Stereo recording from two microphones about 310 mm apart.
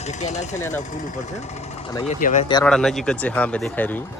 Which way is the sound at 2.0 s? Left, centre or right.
Left.